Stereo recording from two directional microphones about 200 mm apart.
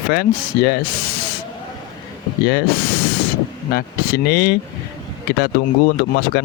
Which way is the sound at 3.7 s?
50° left (ahead or behind).